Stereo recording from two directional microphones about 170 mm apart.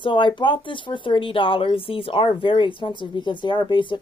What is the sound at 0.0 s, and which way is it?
A woman's voice, 30° left (ahead or behind).